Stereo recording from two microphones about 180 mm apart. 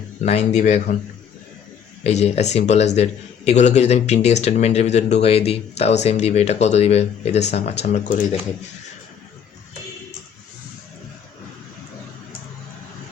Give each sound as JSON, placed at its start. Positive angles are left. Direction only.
{"t": 0.2, "sound": "a man's voice", "side_deg": 40}
{"t": 2.0, "sound": "a man's voice", "side_deg": 35}